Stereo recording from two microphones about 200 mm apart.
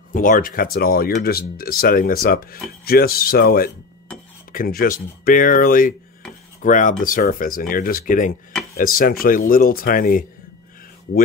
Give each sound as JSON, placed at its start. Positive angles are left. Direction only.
{"t": 0.1, "sound": "speech", "side_deg": 40}